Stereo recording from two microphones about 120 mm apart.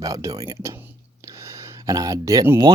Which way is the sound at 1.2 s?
25° right (ahead or behind).